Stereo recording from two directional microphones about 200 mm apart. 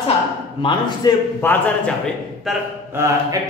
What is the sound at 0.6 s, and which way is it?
Speech, 25° left (ahead or behind).